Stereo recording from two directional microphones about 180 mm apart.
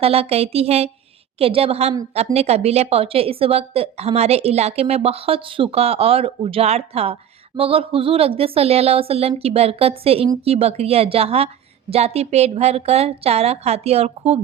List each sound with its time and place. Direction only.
0.0 s speech: 35° right (ahead or behind)